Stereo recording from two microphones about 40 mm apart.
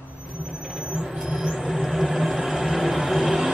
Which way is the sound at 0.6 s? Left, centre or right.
Centre.